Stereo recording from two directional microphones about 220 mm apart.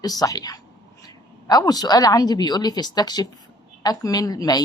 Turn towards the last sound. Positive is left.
turn(degrees=15)  # may be behind; listen again after turning